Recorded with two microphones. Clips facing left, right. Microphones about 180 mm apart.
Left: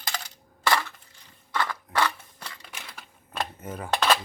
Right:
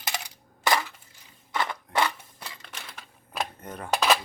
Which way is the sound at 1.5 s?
20° right (ahead or behind).